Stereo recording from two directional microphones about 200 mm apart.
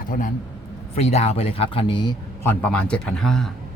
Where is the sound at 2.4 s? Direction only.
10° left (ahead or behind).